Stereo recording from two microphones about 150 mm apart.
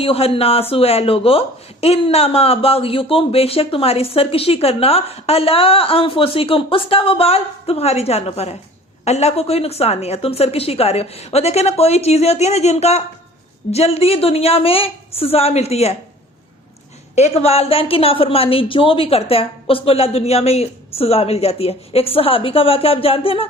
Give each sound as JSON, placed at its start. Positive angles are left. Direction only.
{"t": 0.0, "sound": "a woman's voice", "side_deg": 40}
{"t": 17.2, "sound": "speech", "side_deg": 45}